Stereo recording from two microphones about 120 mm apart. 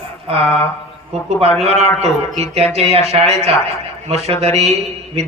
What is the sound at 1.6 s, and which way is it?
Speech, 60° right (ahead or behind).